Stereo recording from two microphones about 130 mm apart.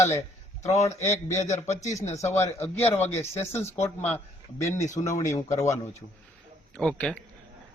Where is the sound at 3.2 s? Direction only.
20° left (ahead or behind).